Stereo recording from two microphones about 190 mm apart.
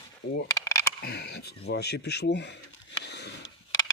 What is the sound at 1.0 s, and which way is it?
Speech, 60° left (ahead or behind).